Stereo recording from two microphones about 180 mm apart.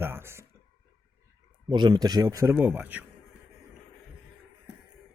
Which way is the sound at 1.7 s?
25° right (ahead or behind).